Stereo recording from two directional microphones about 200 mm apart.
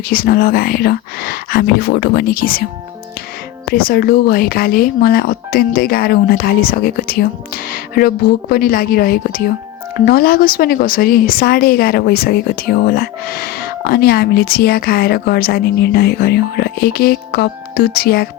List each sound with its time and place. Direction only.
0.1 s a woman's voice: 50° left (ahead or behind)
3.8 s a woman's voice: 45° left (ahead or behind)